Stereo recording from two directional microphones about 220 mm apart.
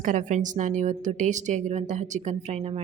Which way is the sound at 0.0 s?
35° right (ahead or behind).